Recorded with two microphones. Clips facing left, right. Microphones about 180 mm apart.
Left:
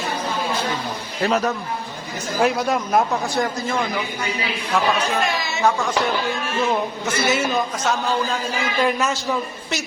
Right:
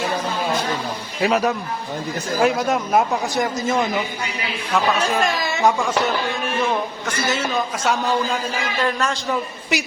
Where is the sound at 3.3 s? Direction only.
20° right (ahead or behind).